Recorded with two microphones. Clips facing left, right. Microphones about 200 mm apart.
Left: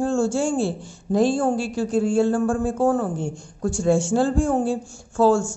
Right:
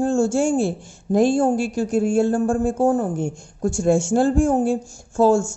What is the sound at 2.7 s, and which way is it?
Speech, 20° right (ahead or behind).